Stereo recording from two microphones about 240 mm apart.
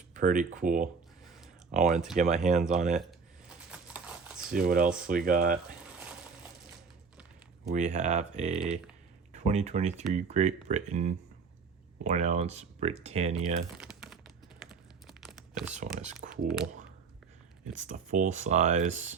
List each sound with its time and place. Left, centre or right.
0.1 s speech: right
3.1 s shuffling cards: centre
4.6 s speech: right
7.7 s speech: right
13.7 s crumpling: centre
15.7 s speech: right
17.7 s speech: right